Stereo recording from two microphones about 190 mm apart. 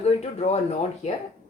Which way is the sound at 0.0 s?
35° left (ahead or behind).